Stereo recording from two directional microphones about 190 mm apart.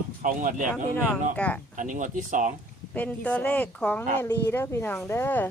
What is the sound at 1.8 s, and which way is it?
Speech, 40° right (ahead or behind).